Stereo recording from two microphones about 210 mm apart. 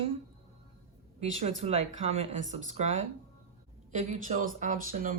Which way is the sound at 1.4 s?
30° right (ahead or behind).